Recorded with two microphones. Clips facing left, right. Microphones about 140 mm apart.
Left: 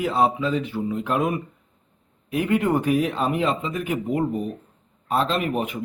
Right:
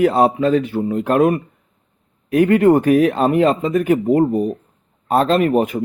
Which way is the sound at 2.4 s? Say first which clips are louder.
Right 9 dB; 55° right (ahead or behind).